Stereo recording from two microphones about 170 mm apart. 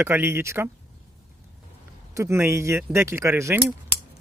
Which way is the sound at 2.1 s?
15° right (ahead or behind).